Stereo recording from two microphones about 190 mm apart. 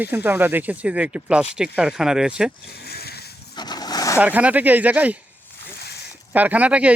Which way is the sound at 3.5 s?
20° left (ahead or behind).